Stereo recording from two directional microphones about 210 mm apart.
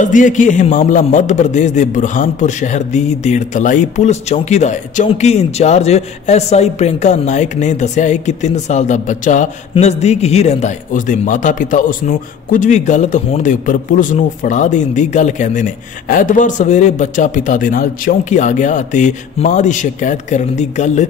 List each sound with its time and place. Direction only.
0.0 s a man's voice: 35° left (ahead or behind)